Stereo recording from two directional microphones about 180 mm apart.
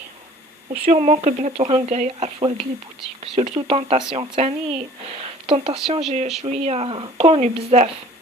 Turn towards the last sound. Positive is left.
turn(degrees=-40)  # may be behind; listen again after turning